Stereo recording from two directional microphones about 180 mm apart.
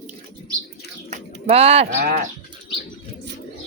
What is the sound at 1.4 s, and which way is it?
Speech, 35° right (ahead or behind).